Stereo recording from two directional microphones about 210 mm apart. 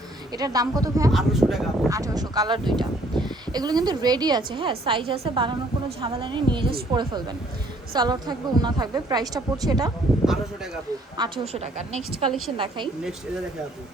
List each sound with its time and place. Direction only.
0.3 s speech: 15° right (ahead or behind)
1.1 s speech: centre (ahead or behind)
1.9 s speech: 15° right (ahead or behind)
11.2 s a woman's voice: 30° right (ahead or behind)